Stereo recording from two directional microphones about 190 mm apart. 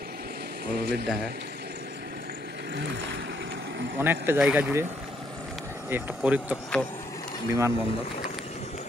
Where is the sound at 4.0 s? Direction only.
10° right (ahead or behind).